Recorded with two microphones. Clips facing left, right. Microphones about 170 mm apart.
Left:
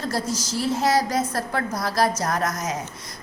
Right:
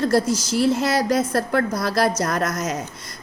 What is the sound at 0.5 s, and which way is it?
A woman's voice, 65° right (ahead or behind).